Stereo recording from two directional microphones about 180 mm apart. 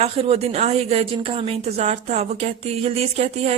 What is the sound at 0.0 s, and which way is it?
A woman's voice, 35° right (ahead or behind).